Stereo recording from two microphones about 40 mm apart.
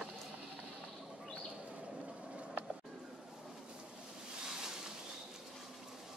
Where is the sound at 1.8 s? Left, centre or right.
Right.